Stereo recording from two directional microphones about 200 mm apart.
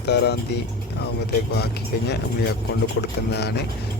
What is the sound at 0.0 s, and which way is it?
Speech, 55° left (ahead or behind).